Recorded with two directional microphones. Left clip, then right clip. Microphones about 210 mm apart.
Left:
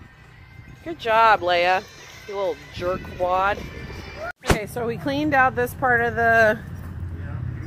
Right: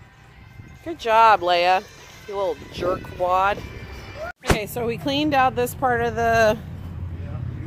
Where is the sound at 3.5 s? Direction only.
40° right (ahead or behind).